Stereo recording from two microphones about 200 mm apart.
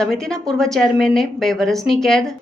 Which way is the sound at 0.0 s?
Centre (ahead or behind).